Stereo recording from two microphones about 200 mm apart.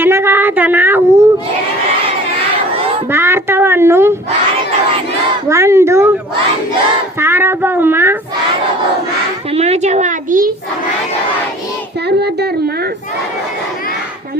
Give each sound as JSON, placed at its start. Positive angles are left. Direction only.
{"t": 0.0, "sound": "a woman's voice", "side_deg": -10}
{"t": 3.1, "sound": "speech", "side_deg": -10}
{"t": 5.5, "sound": "speech", "side_deg": -15}
{"t": 7.2, "sound": "speech", "side_deg": -10}
{"t": 9.5, "sound": "a woman's voice", "side_deg": -30}
{"t": 12.0, "sound": "speech", "side_deg": -55}